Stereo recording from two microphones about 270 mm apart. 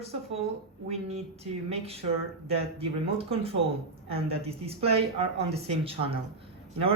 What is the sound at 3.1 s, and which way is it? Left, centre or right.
Speech, right.